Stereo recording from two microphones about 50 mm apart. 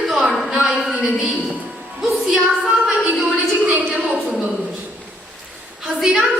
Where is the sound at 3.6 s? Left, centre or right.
Right.